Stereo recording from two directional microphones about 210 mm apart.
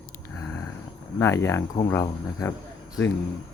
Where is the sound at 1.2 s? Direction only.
10° left (ahead or behind).